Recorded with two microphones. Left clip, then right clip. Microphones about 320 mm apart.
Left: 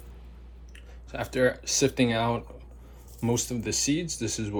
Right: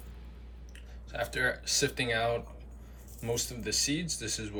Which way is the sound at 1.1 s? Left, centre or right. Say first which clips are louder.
Left 5 dB; centre.